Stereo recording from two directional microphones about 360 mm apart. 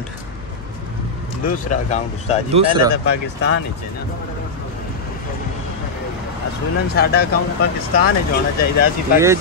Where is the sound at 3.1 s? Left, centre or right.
Left.